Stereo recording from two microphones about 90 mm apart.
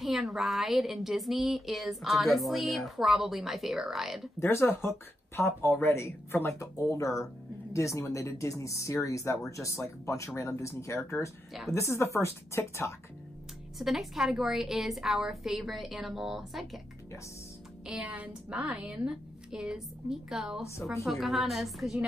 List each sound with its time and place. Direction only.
0.0 s speech: centre (ahead or behind)
4.4 s speech: 25° left (ahead or behind)
13.7 s speech: centre (ahead or behind)
17.8 s a woman's voice: 15° right (ahead or behind)